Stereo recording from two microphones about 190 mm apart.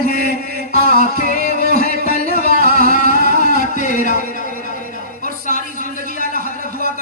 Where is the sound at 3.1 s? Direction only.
50° right (ahead or behind).